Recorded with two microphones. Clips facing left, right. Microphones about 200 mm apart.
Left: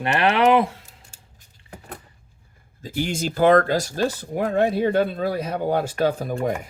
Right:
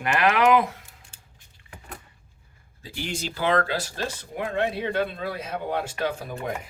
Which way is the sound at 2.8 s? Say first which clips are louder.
Left 7 dB; 45° left (ahead or behind).